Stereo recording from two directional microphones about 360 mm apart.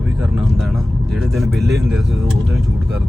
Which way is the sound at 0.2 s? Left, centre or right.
Centre.